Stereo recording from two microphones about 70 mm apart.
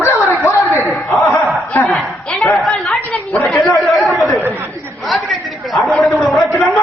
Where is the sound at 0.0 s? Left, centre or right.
Left.